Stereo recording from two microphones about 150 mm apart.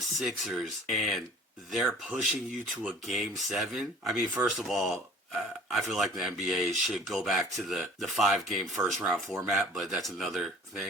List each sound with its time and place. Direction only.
0.2 s speech: centre (ahead or behind)